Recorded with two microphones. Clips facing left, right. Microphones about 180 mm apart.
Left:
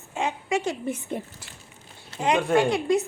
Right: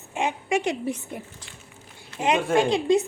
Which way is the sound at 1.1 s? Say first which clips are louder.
Left 4 dB; 25° left (ahead or behind).